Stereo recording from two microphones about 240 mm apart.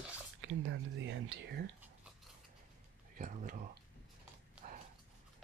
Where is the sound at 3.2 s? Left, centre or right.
Right.